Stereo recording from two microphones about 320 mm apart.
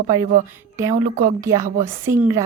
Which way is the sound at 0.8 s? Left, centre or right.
Centre.